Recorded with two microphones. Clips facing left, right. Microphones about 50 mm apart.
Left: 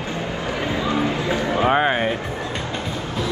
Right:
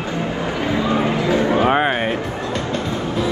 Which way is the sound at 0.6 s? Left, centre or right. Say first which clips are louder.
Right 3 dB; right.